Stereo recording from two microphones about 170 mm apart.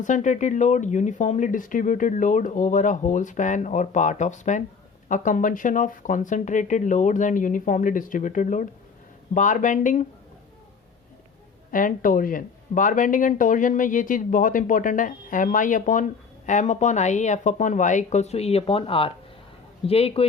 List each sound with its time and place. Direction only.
0.0 s speech: 45° left (ahead or behind)
11.7 s speech: 50° left (ahead or behind); by 20.2 s 35° left (ahead or behind)